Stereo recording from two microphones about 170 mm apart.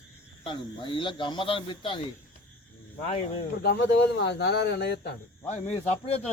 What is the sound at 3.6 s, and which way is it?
Speech, 85° left.